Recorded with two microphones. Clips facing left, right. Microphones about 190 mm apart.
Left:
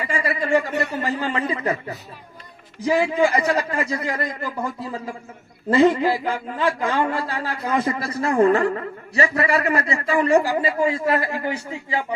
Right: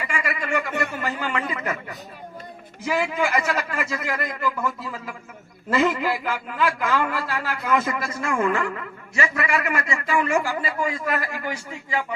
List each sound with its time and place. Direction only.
0.0 s a man's voice: 35° left (ahead or behind)